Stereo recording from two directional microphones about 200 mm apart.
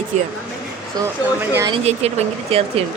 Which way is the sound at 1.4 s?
15° right (ahead or behind).